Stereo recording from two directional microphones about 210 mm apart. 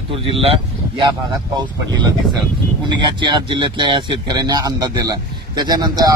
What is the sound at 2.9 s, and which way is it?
Speech, 20° right (ahead or behind).